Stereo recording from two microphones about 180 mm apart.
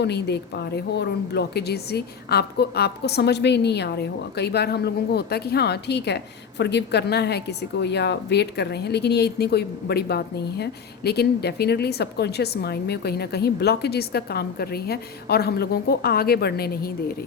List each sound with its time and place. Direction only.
0.0 s a woman's voice: 70° left (ahead or behind)